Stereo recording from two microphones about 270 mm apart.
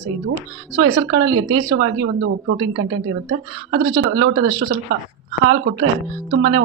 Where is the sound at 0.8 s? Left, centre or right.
Right.